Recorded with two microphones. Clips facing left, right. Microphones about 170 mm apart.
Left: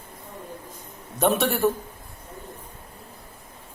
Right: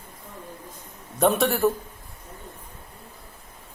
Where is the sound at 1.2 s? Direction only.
Centre (ahead or behind).